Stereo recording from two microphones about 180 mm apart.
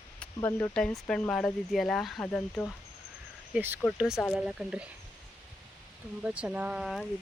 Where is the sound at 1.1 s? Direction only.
5° left (ahead or behind).